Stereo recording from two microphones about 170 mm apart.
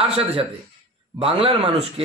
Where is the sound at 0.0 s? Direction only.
35° right (ahead or behind).